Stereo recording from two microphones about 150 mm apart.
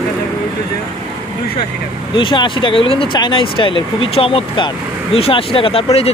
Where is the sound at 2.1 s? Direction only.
35° left (ahead or behind).